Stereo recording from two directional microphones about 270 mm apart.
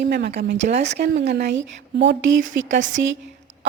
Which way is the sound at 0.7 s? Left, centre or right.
Right.